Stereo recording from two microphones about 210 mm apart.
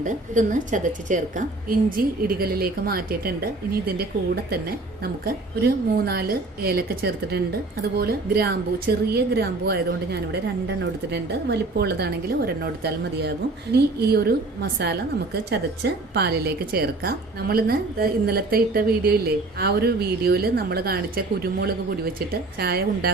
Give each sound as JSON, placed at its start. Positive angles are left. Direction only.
{"t": 0.0, "sound": "a woman's voice", "side_deg": -35}
{"t": 5.2, "sound": "speech", "side_deg": -45}